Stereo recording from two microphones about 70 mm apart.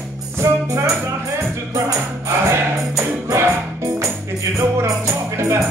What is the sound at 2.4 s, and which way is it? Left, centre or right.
Music, right.